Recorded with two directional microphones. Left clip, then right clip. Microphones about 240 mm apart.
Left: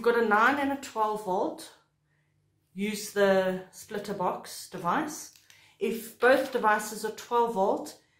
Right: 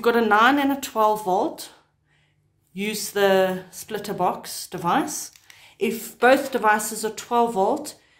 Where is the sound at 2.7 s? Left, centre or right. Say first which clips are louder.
Right 6 dB; right.